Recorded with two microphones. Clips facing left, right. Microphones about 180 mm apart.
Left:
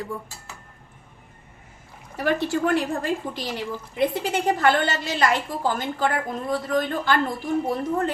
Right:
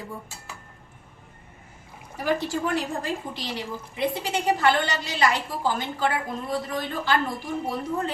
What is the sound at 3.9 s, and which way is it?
A woman's voice, 50° left (ahead or behind).